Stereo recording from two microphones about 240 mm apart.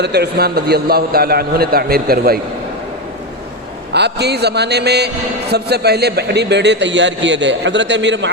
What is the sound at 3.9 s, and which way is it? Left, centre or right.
A man's voice, right.